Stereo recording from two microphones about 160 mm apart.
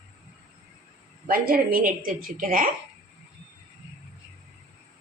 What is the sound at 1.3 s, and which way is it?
A woman's voice, 65° right (ahead or behind).